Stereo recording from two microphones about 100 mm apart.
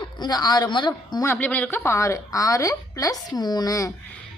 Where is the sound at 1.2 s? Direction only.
20° left (ahead or behind); by 3.9 s 35° left (ahead or behind).